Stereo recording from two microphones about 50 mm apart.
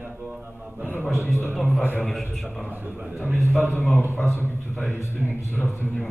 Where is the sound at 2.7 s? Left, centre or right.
Right.